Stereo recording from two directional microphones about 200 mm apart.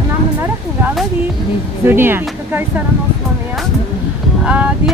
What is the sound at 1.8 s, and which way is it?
Speech, 10° right (ahead or behind).